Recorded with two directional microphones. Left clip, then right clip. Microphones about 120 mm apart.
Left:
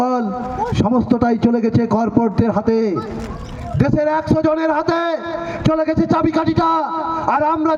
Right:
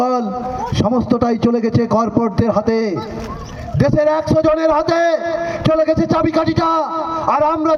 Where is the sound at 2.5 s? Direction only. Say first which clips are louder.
Right 1 dB; 45° left (ahead or behind).